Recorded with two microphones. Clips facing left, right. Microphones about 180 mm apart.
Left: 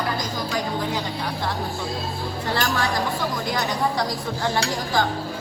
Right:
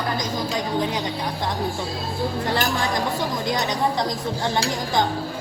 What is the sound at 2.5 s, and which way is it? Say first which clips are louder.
A woman's voice: left 3 dB; 20° right (ahead or behind).